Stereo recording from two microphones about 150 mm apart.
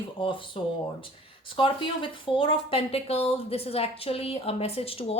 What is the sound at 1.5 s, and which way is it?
Speech, 35° left (ahead or behind).